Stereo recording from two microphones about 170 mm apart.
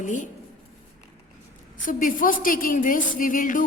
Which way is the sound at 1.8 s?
55° left (ahead or behind).